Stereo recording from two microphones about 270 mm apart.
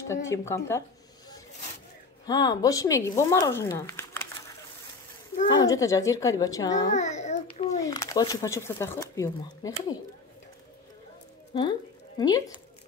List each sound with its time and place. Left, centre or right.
0.1 s speech: centre
2.2 s speech: centre
5.5 s speech: centre
6.9 s babbling: left
7.8 s speech: centre
12.2 s speech: centre